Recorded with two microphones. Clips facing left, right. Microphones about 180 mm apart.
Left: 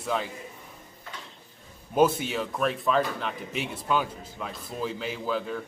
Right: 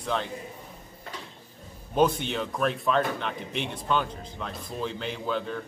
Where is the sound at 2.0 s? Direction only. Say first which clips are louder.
Left 1 dB; 5° left (ahead or behind).